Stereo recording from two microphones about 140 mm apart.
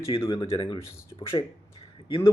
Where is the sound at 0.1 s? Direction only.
35° left (ahead or behind).